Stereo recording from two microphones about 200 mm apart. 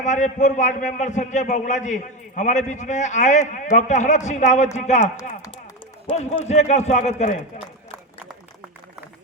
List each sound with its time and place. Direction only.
0.0 s a man's voice: 35° left (ahead or behind)